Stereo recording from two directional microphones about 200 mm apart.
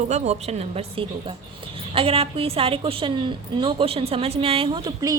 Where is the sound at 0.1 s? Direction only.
35° right (ahead or behind).